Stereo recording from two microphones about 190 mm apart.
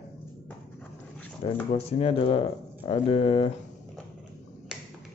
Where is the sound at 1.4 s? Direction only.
30° left (ahead or behind).